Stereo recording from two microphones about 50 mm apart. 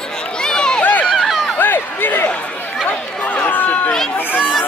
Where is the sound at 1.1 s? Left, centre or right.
Centre.